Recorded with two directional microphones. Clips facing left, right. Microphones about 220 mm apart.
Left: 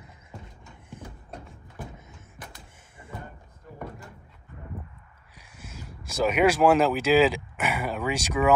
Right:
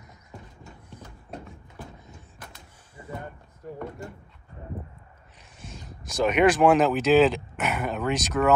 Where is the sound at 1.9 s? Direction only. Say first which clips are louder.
Right 1 dB; 20° left (ahead or behind).